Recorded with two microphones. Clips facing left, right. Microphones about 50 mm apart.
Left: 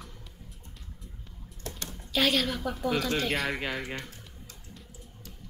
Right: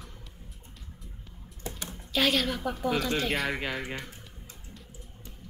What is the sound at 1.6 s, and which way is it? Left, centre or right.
Typing, centre.